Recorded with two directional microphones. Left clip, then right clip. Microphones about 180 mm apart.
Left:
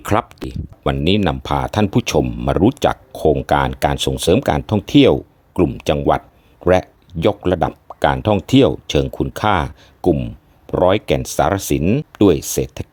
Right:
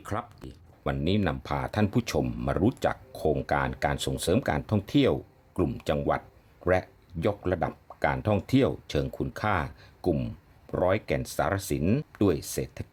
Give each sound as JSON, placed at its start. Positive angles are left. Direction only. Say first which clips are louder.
{"t": 0.0, "sound": "speech", "louder": "left 16 dB", "side_deg": 45}